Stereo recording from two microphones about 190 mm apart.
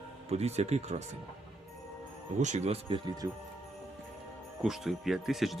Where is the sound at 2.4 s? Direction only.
40° right (ahead or behind).